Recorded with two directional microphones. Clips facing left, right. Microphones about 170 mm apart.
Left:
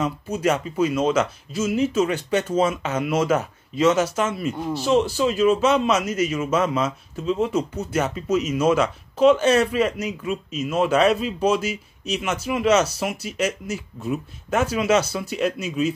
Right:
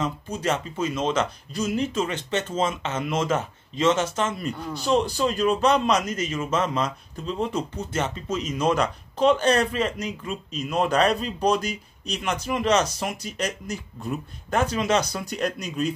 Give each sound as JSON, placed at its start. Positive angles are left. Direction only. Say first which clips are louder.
{"t": 0.0, "sound": "speech", "louder": "left 4 dB", "side_deg": 10}